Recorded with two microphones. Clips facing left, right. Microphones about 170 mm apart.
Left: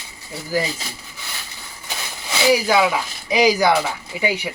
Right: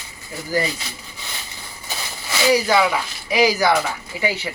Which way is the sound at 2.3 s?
15° left (ahead or behind).